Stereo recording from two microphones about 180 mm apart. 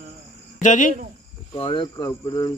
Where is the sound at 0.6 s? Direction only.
45° left (ahead or behind).